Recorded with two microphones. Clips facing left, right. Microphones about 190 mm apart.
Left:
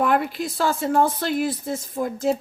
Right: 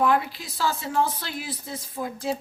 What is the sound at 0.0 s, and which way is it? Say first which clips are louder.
Speech: left 2 dB; 55° left (ahead or behind).